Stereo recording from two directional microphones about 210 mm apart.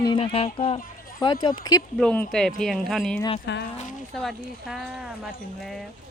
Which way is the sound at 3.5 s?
55° left (ahead or behind).